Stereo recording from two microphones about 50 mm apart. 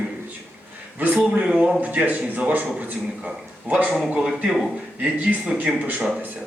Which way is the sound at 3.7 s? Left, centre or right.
Right.